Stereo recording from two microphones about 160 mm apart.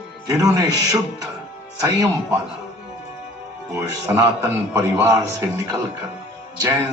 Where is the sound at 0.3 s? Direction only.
20° right (ahead or behind).